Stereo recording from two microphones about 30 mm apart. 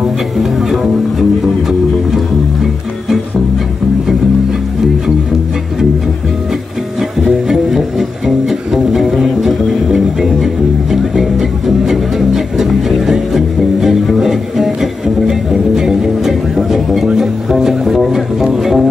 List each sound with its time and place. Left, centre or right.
0.4 s speech: centre
7.0 s music: centre